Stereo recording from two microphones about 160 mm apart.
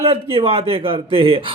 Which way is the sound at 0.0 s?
35° right (ahead or behind).